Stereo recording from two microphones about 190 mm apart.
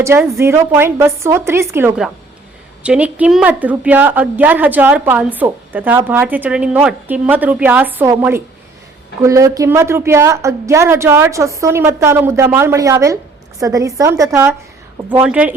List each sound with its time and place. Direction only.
0.0 s a woman's voice: 15° right (ahead or behind)